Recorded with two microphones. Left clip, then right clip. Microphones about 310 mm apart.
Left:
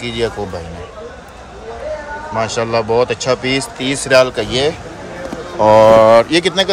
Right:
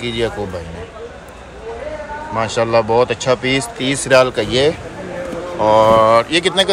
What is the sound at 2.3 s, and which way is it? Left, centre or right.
Speech, centre.